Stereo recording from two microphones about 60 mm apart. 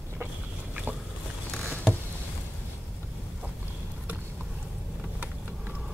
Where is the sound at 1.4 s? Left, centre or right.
Centre.